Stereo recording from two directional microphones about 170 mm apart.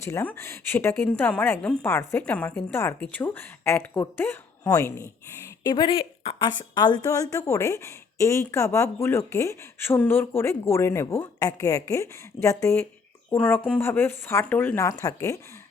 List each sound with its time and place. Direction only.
0.0 s a woman's voice: 15° left (ahead or behind)